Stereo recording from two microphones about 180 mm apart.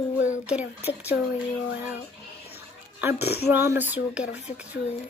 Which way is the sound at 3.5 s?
10° right (ahead or behind).